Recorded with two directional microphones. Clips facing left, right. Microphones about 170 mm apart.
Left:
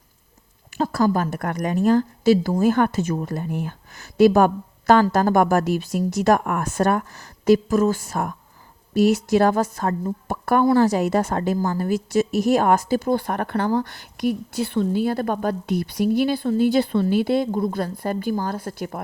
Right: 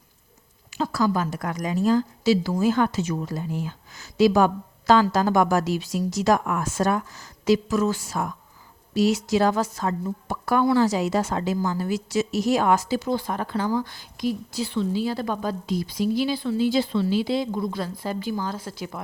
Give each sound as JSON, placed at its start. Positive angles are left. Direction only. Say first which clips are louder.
{"t": 0.7, "sound": "a woman's voice", "louder": "left 3 dB", "side_deg": 50}